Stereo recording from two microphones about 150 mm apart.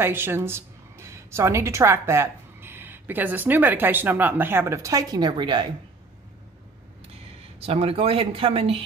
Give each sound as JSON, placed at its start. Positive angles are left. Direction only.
{"t": 0.0, "sound": "a woman's voice", "side_deg": -15}
{"t": 7.6, "sound": "speech", "side_deg": -40}